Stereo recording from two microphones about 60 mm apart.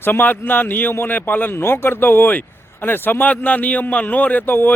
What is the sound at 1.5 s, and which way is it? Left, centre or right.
A man's voice, left.